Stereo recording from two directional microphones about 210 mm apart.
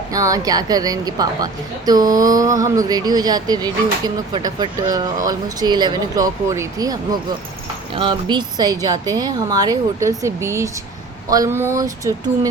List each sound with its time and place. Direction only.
0.1 s a woman's voice: 15° right (ahead or behind)